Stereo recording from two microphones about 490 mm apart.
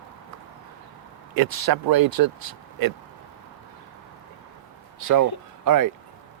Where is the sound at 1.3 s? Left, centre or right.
Right.